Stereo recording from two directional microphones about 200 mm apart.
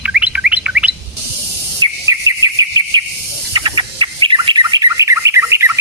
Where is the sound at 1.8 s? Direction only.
15° right (ahead or behind).